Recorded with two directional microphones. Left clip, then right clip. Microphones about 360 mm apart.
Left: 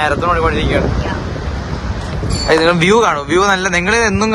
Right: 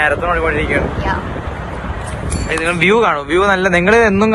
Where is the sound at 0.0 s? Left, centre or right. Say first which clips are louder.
Even; centre.